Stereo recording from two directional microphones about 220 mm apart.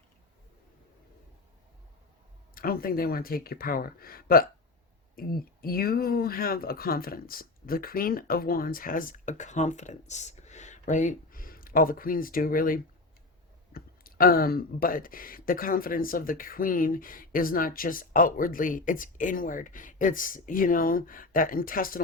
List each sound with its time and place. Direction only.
2.6 s speech: 40° left (ahead or behind)